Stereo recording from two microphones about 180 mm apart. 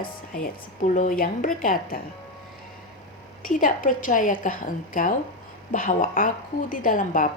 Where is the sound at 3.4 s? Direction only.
50° left (ahead or behind).